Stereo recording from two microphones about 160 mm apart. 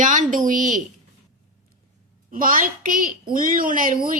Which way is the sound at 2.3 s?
60° right (ahead or behind).